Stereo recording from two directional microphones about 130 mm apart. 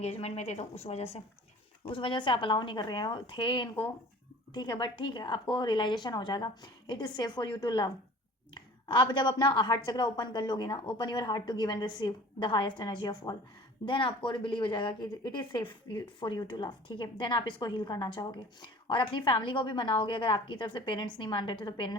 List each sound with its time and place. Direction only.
0.0 s a woman's voice: 55° left (ahead or behind)
1.8 s speech: 40° left (ahead or behind)